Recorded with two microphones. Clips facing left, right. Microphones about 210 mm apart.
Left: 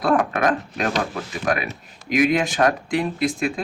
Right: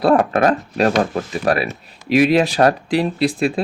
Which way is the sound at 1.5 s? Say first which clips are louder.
Right 4 dB; 35° right (ahead or behind).